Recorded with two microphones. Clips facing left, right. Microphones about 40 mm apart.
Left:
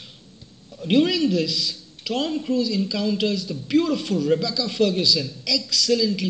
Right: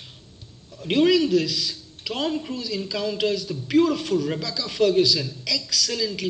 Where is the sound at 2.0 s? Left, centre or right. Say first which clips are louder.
Left 1 dB; centre.